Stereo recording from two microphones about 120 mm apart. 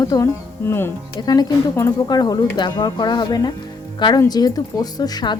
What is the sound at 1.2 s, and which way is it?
A woman's voice, 35° left (ahead or behind).